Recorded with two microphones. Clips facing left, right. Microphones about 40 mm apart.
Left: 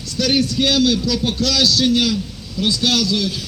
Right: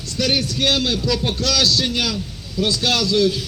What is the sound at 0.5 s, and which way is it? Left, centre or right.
A man's voice, right.